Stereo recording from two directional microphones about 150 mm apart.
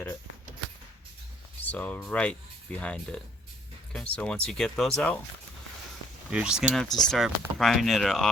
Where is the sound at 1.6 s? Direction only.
10° left (ahead or behind).